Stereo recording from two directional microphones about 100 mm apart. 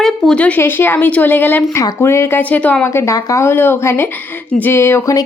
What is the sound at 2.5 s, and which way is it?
A woman's voice, 15° left (ahead or behind).